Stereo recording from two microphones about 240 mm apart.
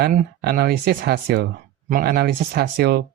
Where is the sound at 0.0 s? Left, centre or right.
Right.